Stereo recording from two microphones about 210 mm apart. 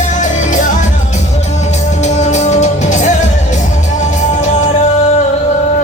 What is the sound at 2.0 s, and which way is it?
Music, 35° left (ahead or behind).